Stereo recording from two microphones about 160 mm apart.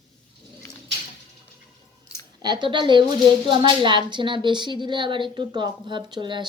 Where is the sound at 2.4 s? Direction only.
25° right (ahead or behind).